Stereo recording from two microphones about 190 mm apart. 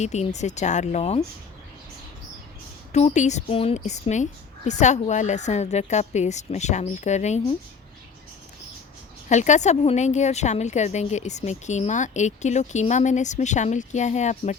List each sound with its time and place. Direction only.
0.0 s a woman's voice: 35° left (ahead or behind)
2.9 s a woman's voice: 35° left (ahead or behind)
9.3 s a woman's voice: 40° left (ahead or behind)